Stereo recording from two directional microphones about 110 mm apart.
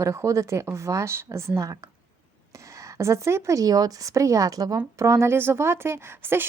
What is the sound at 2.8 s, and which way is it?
Speech, 25° right (ahead or behind).